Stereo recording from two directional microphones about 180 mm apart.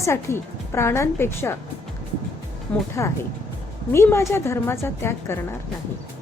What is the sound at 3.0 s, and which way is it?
Speech, 15° left (ahead or behind).